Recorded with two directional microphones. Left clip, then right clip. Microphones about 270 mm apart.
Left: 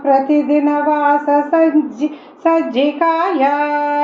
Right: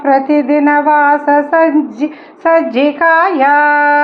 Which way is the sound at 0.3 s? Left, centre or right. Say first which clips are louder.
Right 3 dB; right.